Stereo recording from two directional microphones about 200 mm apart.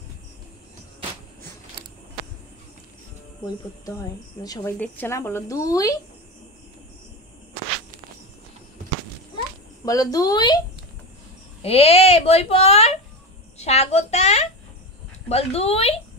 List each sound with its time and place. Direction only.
4.4 s speech: 20° left (ahead or behind)
4.7 s speech: 10° left (ahead or behind)
9.8 s speech: 15° left (ahead or behind)
11.6 s a woman's voice: 30° left (ahead or behind)